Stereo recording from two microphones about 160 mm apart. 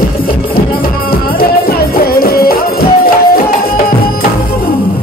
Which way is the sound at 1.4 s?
70° left (ahead or behind).